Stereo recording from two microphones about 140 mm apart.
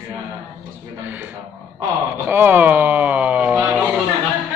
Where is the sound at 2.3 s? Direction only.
15° right (ahead or behind).